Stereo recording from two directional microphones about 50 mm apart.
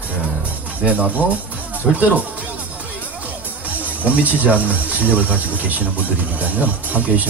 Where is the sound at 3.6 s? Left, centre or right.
Right.